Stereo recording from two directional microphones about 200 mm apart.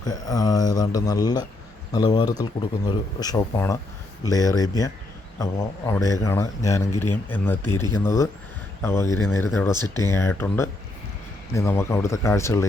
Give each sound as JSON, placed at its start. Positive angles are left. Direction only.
{"t": 0.0, "sound": "a man's voice", "side_deg": 20}